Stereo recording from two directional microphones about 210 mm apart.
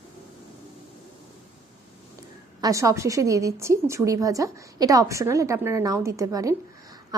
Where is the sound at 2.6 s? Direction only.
15° right (ahead or behind).